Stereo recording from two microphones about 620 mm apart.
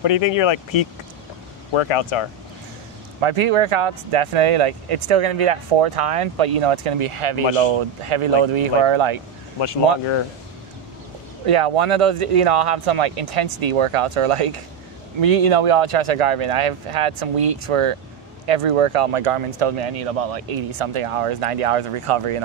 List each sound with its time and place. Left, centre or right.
0.0 s speech: left
1.7 s speech: left
3.2 s speech: right
9.6 s speech: left
11.4 s speech: right